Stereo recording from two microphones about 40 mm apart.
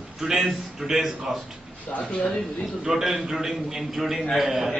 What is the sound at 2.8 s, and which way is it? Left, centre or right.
A man's voice, centre.